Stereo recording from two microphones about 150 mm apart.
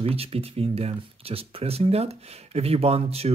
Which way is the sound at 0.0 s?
40° right (ahead or behind).